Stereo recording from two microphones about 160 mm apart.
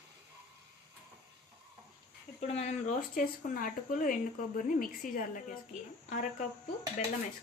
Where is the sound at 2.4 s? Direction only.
40° left (ahead or behind).